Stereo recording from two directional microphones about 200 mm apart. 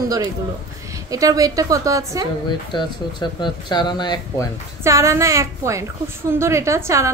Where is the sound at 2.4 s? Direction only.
25° left (ahead or behind).